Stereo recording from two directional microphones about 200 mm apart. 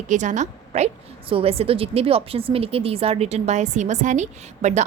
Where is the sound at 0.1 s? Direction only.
35° right (ahead or behind).